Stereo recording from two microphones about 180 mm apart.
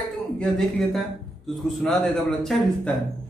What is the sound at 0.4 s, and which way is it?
A man's voice, centre (ahead or behind).